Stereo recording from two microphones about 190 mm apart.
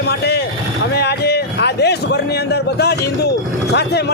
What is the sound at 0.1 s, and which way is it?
Vehicle, 60° left (ahead or behind).